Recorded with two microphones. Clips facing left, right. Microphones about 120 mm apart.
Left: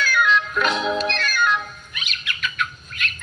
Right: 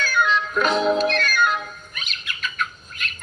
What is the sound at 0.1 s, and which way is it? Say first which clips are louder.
Music: right 1 dB; 35° right (ahead or behind).